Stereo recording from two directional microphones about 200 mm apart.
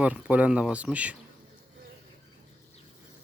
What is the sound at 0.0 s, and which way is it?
Speech, 5° right (ahead or behind).